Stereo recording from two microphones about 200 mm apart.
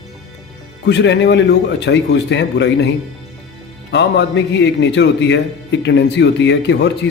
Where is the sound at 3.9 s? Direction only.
60° left (ahead or behind).